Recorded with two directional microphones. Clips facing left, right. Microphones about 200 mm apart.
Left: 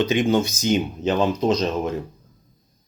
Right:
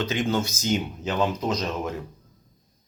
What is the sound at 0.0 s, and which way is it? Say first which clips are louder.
Speech: left 6 dB; 15° left (ahead or behind).